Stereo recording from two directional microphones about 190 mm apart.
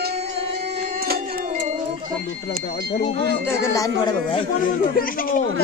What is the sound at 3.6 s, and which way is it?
Speech, 15° left (ahead or behind).